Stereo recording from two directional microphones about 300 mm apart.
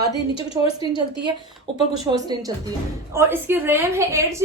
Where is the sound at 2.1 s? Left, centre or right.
Centre.